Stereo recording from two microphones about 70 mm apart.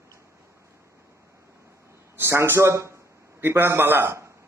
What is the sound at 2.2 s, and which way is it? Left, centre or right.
A man's voice, right.